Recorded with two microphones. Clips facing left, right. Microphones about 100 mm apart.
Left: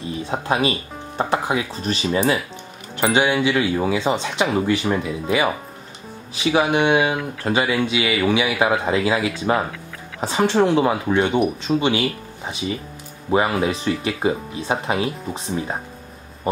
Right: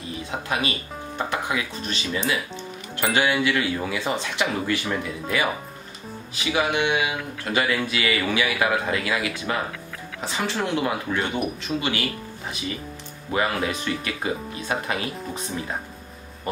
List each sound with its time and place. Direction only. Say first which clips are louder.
0.3 s speech: left 6 dB; 35° left (ahead or behind)
3.0 s speech: left 4 dB; 25° left (ahead or behind)
6.7 s speech: left 6 dB; 40° left (ahead or behind)
7.5 s speech: left 3 dB; 25° left (ahead or behind)